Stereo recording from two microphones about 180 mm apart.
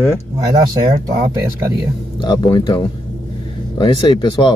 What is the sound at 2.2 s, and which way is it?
Speech, 25° left (ahead or behind).